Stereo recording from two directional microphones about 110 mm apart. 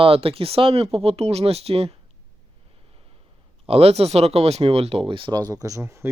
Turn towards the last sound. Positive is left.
turn(degrees=-25)  # may be behind; listen again after turning